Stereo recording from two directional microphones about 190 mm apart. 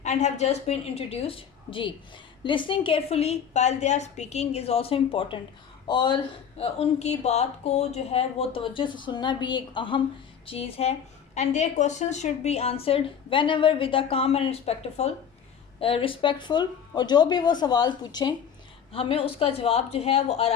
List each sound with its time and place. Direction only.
0.0 s a woman's voice: 40° left (ahead or behind)